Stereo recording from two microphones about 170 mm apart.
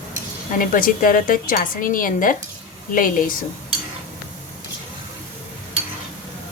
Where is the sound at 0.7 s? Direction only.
55° left (ahead or behind).